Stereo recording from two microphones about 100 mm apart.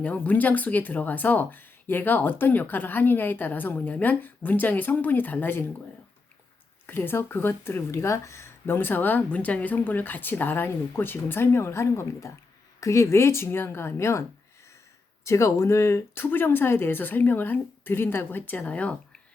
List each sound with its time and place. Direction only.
0.0 s speech: 15° left (ahead or behind)
6.8 s speech: 20° left (ahead or behind)